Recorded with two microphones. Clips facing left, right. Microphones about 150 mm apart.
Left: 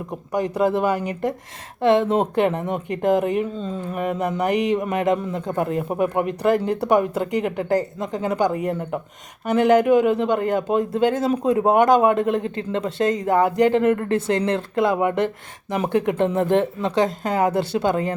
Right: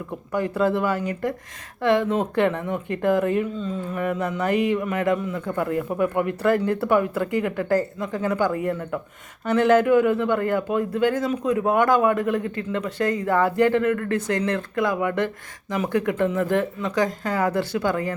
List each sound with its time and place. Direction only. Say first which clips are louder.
0.3 s speech: left 2 dB; 15° left (ahead or behind)
3.4 s speech: left 1 dB; 35° left (ahead or behind)
3.9 s speech: left 3 dB; 20° left (ahead or behind)